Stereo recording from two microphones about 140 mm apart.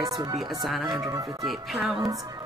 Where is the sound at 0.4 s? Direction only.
Centre (ahead or behind).